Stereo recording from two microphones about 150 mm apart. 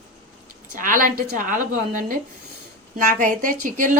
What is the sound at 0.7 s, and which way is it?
A woman's voice, 65° right (ahead or behind).